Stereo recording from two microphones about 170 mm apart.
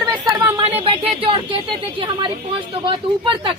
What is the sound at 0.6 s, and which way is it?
Speech, 30° right (ahead or behind).